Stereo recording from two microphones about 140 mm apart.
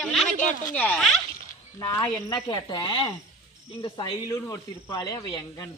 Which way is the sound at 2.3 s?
30° left (ahead or behind).